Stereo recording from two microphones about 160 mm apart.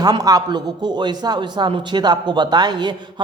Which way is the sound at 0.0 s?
25° right (ahead or behind).